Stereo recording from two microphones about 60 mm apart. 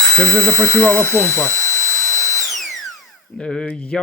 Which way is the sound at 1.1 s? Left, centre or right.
Left.